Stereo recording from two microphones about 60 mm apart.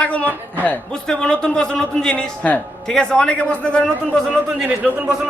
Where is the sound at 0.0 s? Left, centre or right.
Left.